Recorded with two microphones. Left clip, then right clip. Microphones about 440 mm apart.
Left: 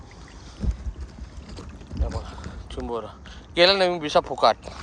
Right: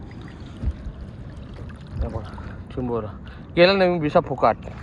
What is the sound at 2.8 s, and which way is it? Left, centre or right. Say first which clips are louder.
Speech: right 4 dB; centre.